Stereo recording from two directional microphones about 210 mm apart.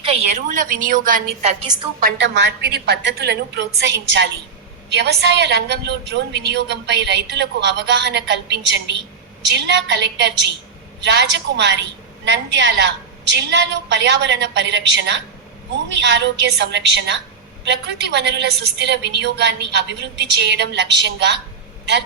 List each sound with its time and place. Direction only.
0.0 s a woman's voice: 30° right (ahead or behind)
2.0 s a woman's voice: 50° right (ahead or behind)